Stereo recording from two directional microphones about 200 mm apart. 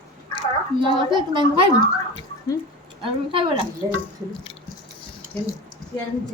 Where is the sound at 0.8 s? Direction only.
25° right (ahead or behind).